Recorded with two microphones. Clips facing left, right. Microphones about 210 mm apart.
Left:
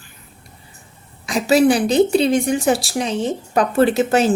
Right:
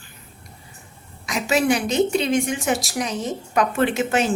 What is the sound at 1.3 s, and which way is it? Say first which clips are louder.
A woman's voice: left 6 dB; 35° left (ahead or behind).